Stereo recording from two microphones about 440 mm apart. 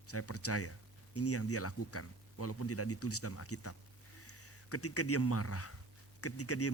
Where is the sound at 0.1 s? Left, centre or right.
Left.